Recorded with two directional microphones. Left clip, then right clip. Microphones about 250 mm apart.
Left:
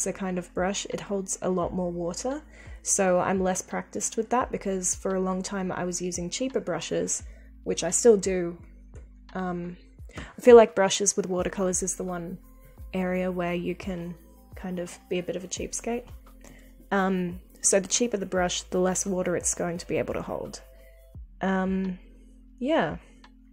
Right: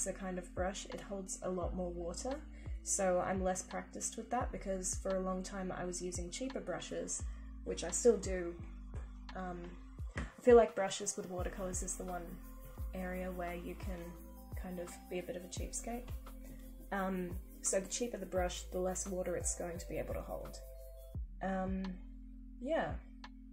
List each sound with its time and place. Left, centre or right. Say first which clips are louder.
0.0 s speech: left 11 dB; left